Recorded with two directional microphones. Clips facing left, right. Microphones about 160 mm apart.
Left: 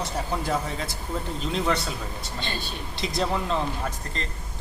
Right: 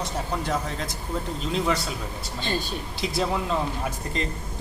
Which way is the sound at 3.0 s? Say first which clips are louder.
Even; centre (ahead or behind).